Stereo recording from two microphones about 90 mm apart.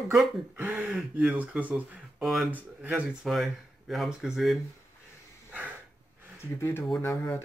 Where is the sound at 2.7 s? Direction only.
15° right (ahead or behind).